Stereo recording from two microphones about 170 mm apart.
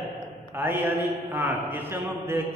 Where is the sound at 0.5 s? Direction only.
10° right (ahead or behind).